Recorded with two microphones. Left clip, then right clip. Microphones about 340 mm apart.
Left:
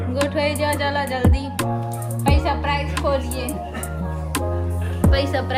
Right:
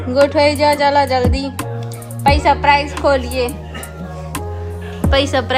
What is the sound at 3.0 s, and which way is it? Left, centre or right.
Speech, right.